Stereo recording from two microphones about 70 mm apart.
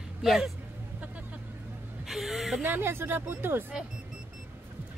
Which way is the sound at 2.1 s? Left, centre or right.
Centre.